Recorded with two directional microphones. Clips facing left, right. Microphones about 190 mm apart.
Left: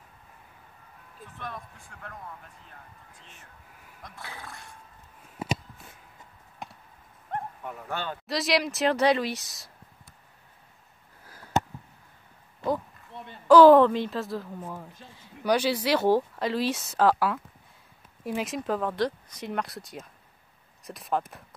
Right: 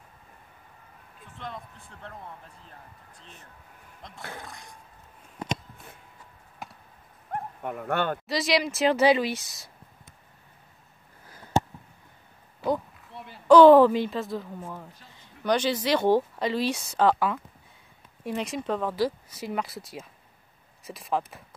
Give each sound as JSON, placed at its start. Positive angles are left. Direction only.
{"t": 1.4, "sound": "speech", "side_deg": -20}
{"t": 3.2, "sound": "speech", "side_deg": -35}
{"t": 4.0, "sound": "speech", "side_deg": -25}
{"t": 4.4, "sound": "a sound", "side_deg": -20}
{"t": 5.4, "sound": "a sound", "side_deg": 5}
{"t": 7.6, "sound": "speech", "side_deg": -55}
{"t": 8.3, "sound": "speech", "side_deg": 0}
{"t": 12.6, "sound": "speech", "side_deg": 0}